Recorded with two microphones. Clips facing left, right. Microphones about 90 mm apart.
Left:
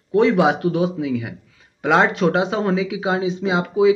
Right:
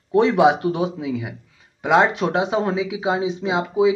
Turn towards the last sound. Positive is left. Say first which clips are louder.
# left 1 dB
turn(degrees=-10)  # may be behind; listen again after turning